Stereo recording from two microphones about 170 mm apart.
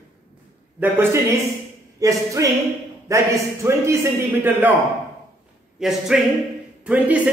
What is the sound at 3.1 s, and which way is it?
A man's voice, 15° right (ahead or behind).